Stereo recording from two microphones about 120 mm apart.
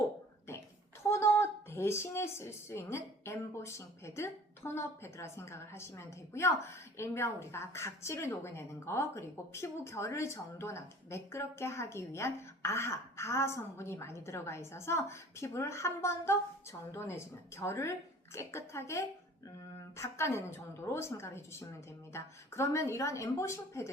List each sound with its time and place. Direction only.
1.1 s a woman's voice: 20° left (ahead or behind)